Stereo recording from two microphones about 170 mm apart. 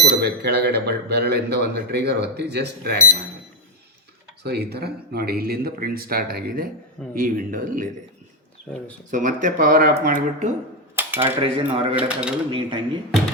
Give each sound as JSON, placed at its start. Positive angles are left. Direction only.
{"t": 0.1, "sound": "speech", "side_deg": -70}
{"t": 4.4, "sound": "speech", "side_deg": -70}
{"t": 9.0, "sound": "speech", "side_deg": -50}
{"t": 10.9, "sound": "a sound", "side_deg": -10}
{"t": 11.5, "sound": "speech", "side_deg": -30}
{"t": 11.9, "sound": "speech", "side_deg": -5}
{"t": 12.5, "sound": "speech", "side_deg": -30}